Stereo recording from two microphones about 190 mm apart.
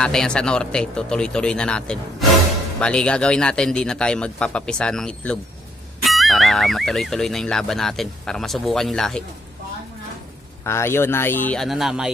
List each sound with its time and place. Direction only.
0.0 s speech: 5° left (ahead or behind)
10.6 s speech: 15° left (ahead or behind); by 12.1 s centre (ahead or behind)